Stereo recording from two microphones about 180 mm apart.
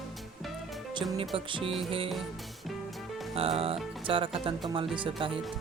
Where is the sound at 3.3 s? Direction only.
30° right (ahead or behind).